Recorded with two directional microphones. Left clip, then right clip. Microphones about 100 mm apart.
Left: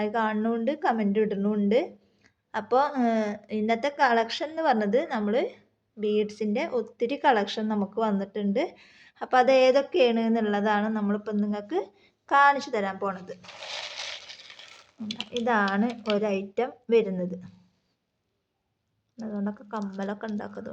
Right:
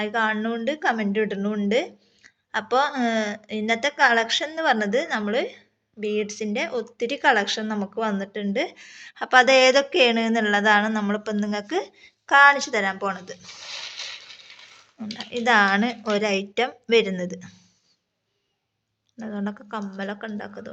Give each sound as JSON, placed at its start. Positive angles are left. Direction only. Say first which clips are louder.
{"t": 0.0, "sound": "a woman's voice", "louder": "right 3 dB", "side_deg": 30}
{"t": 15.2, "sound": "a woman's voice", "louder": "right 2 dB", "side_deg": 20}
{"t": 15.4, "sound": "a woman's voice", "louder": "right 7 dB", "side_deg": 5}
{"t": 19.2, "sound": "speech", "louder": "right 2 dB", "side_deg": -5}
{"t": 19.8, "sound": "speech", "louder": "right 2 dB", "side_deg": 35}